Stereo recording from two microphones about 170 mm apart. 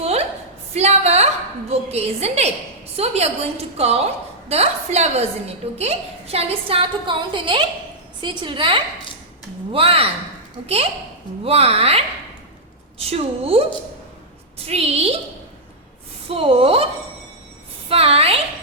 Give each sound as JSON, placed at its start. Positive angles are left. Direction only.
{"t": 0.0, "sound": "a sound", "side_deg": -35}
{"t": 0.8, "sound": "a woman's voice", "side_deg": -40}
{"t": 11.4, "sound": "a woman's voice", "side_deg": -35}
{"t": 14.7, "sound": "a woman's voice", "side_deg": -35}
{"t": 16.3, "sound": "a woman's voice", "side_deg": -35}
{"t": 17.8, "sound": "a woman's voice", "side_deg": -35}